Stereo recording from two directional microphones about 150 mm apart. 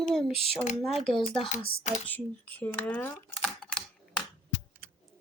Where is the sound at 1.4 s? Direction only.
50° left (ahead or behind).